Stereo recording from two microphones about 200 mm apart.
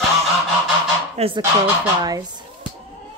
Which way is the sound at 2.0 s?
20° right (ahead or behind).